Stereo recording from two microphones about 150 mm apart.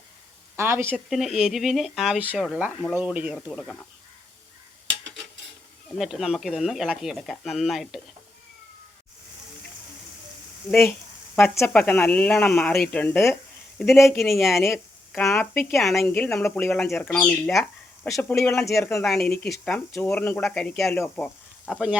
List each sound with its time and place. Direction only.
0.5 s speech: 15° right (ahead or behind)
0.9 s speech: centre (ahead or behind)
3.6 s speech: 5° left (ahead or behind)
6.0 s speech: 5° right (ahead or behind)
11.3 s speech: 15° left (ahead or behind)
13.7 s speech: centre (ahead or behind)
21.7 s speech: 5° right (ahead or behind)